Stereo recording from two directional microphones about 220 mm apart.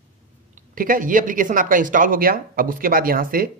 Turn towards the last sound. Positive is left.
turn(degrees=-40)  # may be behind; listen again after turning